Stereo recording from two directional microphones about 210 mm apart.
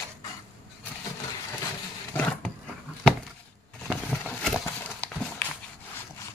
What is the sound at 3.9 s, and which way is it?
Horse, centre (ahead or behind).